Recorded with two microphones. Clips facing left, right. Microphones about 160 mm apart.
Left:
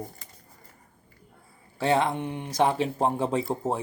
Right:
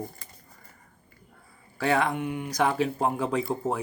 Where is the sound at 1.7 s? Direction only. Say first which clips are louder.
Left 1 dB; 25° left (ahead or behind).